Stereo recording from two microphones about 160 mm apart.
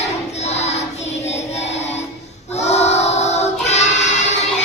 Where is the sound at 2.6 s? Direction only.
45° left (ahead or behind).